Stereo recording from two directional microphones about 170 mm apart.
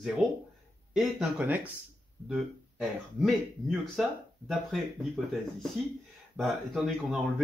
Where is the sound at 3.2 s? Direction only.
Centre (ahead or behind).